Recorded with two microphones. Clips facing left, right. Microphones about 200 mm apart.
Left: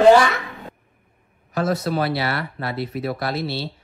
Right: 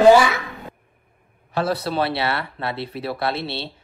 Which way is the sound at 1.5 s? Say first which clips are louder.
Left 1 dB; 30° right (ahead or behind).